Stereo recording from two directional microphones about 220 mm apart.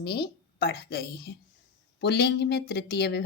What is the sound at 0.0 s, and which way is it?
A woman's voice, 45° left (ahead or behind).